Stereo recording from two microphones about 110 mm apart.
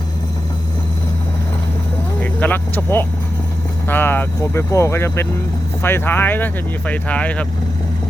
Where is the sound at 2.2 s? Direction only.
15° left (ahead or behind).